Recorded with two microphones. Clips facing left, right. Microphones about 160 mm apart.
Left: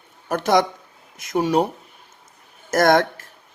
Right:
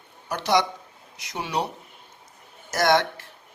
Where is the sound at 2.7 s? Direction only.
50° left (ahead or behind).